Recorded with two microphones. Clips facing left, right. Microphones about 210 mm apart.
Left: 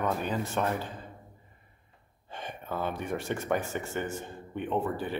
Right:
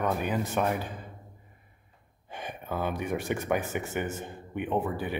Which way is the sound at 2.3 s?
15° right (ahead or behind).